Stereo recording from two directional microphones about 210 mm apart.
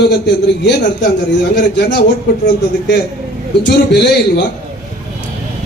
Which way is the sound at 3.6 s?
50° left (ahead or behind).